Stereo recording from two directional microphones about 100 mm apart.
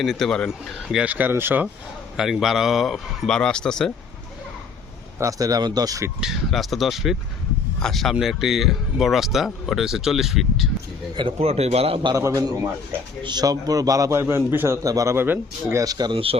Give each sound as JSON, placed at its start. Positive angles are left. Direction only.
{"t": 0.0, "sound": "speech", "side_deg": 5}
{"t": 1.0, "sound": "speech", "side_deg": -15}
{"t": 2.1, "sound": "speech", "side_deg": -5}
{"t": 5.2, "sound": "a man's voice", "side_deg": -35}
{"t": 6.1, "sound": "speech", "side_deg": -5}
{"t": 11.2, "sound": "a man's voice", "side_deg": -75}
{"t": 12.1, "sound": "a man's voice", "side_deg": -30}
{"t": 12.4, "sound": "a man's voice", "side_deg": -40}
{"t": 15.8, "sound": "a man's voice", "side_deg": -40}
{"t": 16.1, "sound": "speech", "side_deg": -70}